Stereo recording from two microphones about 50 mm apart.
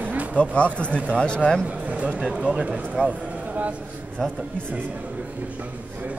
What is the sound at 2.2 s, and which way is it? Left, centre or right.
Speech, centre.